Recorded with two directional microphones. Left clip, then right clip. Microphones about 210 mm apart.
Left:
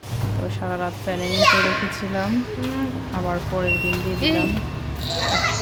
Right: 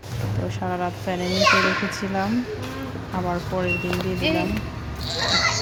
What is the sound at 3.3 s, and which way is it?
Speech, centre (ahead or behind).